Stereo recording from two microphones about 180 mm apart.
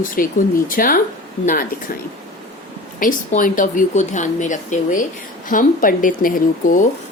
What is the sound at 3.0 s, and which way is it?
A woman's voice, 50° left (ahead or behind).